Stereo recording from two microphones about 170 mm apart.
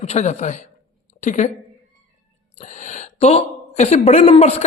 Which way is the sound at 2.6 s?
45° left (ahead or behind).